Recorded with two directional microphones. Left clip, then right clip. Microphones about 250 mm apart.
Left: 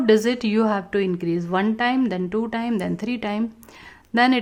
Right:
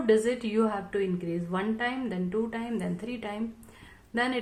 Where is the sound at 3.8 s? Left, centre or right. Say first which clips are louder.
Left 11 dB; left.